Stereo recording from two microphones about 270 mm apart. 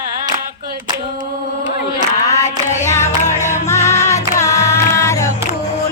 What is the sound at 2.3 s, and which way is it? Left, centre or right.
Female singing, left.